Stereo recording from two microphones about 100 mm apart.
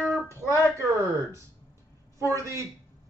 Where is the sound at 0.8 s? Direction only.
30° right (ahead or behind).